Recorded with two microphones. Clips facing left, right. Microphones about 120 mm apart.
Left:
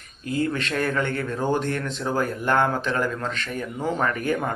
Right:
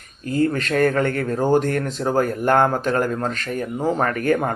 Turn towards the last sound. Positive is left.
turn(degrees=-45)  # may be behind; listen again after turning